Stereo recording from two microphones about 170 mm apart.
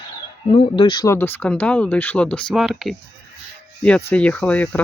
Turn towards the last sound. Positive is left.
turn(degrees=5)  # may be behind; listen again after turning